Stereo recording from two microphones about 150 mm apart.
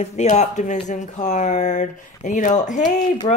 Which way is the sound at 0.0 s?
50° left (ahead or behind).